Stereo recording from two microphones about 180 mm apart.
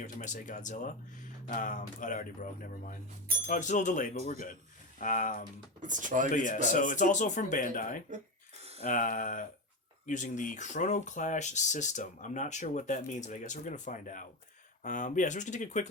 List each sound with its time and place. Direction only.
0.0 s speech: 45° left (ahead or behind)
5.8 s speech: 45° right (ahead or behind)
6.3 s speech: 45° left (ahead or behind)